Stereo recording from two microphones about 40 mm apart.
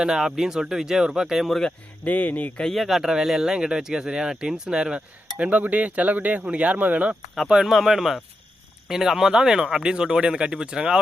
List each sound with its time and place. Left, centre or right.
0.0 s speech: centre
2.0 s speech: left
2.7 s speech: centre
3.1 s speech: centre
4.9 s speech: right
7.6 s speech: centre